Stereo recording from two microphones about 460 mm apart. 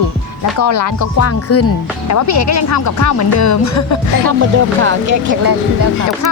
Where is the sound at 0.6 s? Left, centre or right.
Left.